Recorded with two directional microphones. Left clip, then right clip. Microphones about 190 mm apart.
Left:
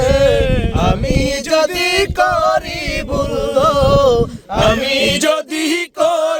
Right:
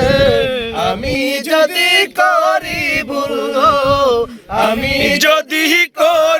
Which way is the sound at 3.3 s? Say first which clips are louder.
Right 1 dB; 40° right (ahead or behind).